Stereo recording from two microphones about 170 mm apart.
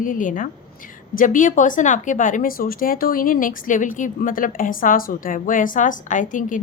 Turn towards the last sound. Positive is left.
turn(degrees=50)  # may be behind; listen again after turning